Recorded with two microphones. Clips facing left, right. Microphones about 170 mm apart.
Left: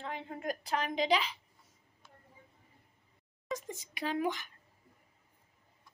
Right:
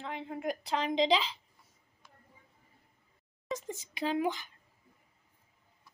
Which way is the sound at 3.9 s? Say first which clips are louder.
Right 2 dB; 25° right (ahead or behind).